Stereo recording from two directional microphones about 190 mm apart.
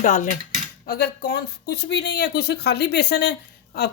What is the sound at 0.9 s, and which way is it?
A woman's voice, 55° left (ahead or behind).